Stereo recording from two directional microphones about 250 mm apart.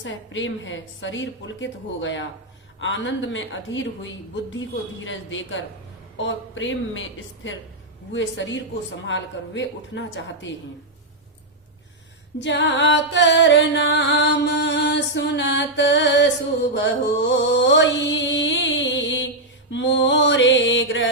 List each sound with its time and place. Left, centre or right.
0.0 s music: left
8.1 s music: left
12.4 s music: left
16.7 s mantra: left
19.7 s music: left